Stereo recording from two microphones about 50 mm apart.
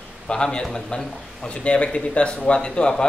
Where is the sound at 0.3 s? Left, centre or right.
Centre.